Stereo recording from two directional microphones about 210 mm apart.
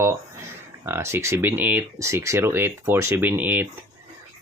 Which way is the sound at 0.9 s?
10° right (ahead or behind).